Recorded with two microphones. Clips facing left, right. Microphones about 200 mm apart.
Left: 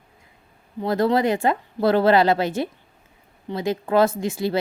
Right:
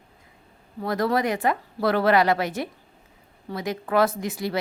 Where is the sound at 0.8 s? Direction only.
25° left (ahead or behind).